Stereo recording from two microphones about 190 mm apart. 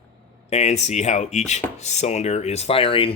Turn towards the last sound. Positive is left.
turn(degrees=30)  # may be behind; listen again after turning